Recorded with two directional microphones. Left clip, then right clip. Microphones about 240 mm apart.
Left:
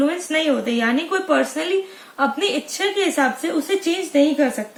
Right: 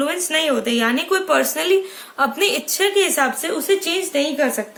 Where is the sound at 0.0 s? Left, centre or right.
Right.